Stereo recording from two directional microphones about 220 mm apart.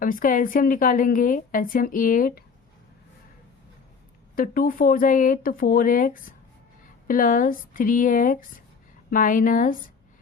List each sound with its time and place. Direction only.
0.0 s a woman's voice: 40° left (ahead or behind)
4.4 s a woman's voice: 40° left (ahead or behind)